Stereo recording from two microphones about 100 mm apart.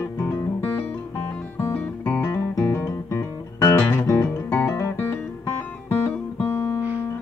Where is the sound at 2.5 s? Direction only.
35° left (ahead or behind).